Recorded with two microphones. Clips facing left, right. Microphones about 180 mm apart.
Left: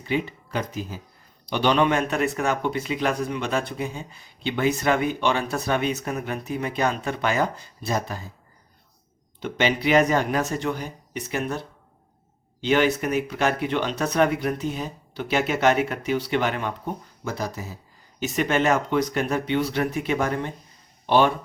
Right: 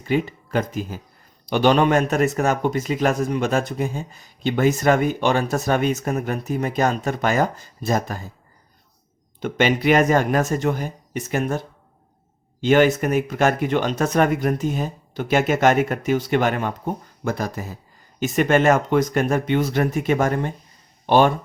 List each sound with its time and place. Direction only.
0.0 s speech: 45° right (ahead or behind)
9.4 s speech: 50° right (ahead or behind)
12.6 s speech: 45° right (ahead or behind)